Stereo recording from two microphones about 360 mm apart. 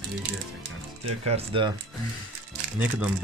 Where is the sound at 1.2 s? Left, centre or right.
Centre.